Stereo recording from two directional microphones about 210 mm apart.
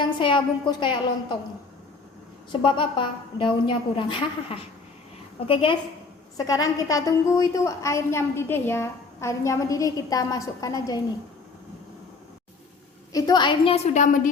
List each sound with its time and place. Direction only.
0.0 s a woman's voice: 25° left (ahead or behind)
2.5 s a woman's voice: 25° left (ahead or behind)
13.1 s a woman's voice: 20° left (ahead or behind); by 14.2 s 35° left (ahead or behind)